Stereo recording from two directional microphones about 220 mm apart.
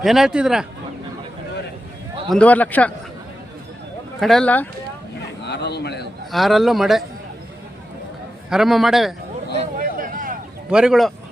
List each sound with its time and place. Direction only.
0.0 s speech: centre (ahead or behind)
2.3 s speech: 5° left (ahead or behind)
4.2 s speech: centre (ahead or behind)
5.5 s a sound: 50° left (ahead or behind)
6.3 s speech: centre (ahead or behind)
8.4 s speech: centre (ahead or behind)
9.6 s a sound: 35° right (ahead or behind)
10.7 s speech: 5° right (ahead or behind)